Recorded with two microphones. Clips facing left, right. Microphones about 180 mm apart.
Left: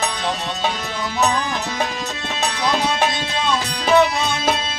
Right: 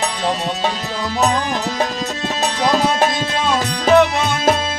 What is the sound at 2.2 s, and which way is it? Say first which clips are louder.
Music: right 4 dB; 40° right (ahead or behind).